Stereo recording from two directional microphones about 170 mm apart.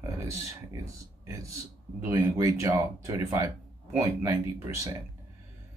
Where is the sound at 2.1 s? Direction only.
20° right (ahead or behind).